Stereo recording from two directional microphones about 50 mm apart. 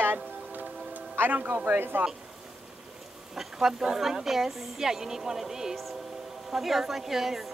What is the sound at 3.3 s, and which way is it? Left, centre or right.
A woman's voice, centre.